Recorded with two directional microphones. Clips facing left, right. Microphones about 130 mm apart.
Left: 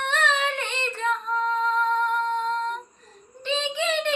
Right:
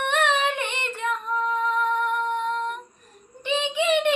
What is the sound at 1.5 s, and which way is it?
Music, 15° right (ahead or behind).